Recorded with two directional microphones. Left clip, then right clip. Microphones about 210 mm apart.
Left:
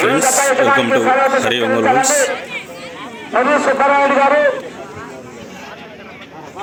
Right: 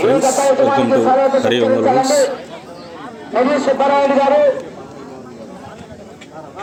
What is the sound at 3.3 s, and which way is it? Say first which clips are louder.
A man's voice: left 1 dB; 30° left (ahead or behind).